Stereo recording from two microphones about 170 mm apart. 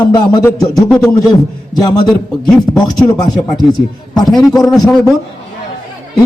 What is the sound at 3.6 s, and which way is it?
A man's voice, 25° left (ahead or behind).